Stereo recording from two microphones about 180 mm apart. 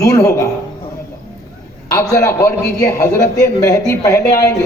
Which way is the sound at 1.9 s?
20° left (ahead or behind).